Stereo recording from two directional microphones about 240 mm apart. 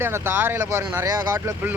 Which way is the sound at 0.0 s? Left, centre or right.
Centre.